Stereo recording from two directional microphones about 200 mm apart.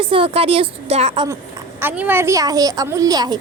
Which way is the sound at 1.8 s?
10° right (ahead or behind).